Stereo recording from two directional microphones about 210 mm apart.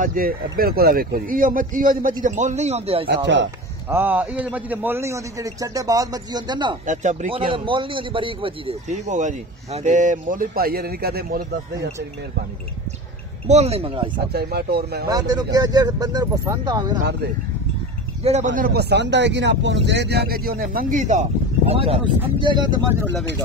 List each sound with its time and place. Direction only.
0.0 s a man's voice: 40° right (ahead or behind)
3.9 s a man's voice: 10° right (ahead or behind)
6.9 s a man's voice: 35° right (ahead or behind)
13.5 s speech: 30° right (ahead or behind)
14.3 s speech: 50° right (ahead or behind)
15.0 s a man's voice: 20° right (ahead or behind)
18.2 s speech: 35° right (ahead or behind)